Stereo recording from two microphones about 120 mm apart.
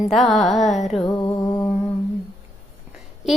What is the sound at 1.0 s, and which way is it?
Music, 35° left (ahead or behind).